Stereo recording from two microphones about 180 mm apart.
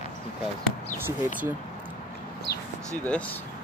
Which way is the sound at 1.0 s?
10° right (ahead or behind).